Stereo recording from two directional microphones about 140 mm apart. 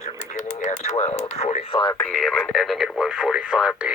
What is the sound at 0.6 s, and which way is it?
Speech, 60° left (ahead or behind).